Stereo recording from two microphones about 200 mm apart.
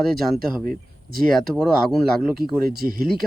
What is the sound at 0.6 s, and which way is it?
Speech, 45° right (ahead or behind).